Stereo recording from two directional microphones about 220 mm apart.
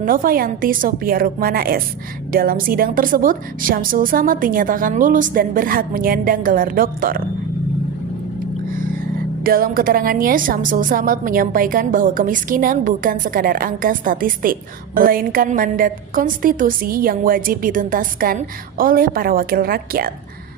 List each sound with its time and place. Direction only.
0.0 s a woman's voice: 40° right (ahead or behind)
9.4 s a woman's voice: 40° right (ahead or behind)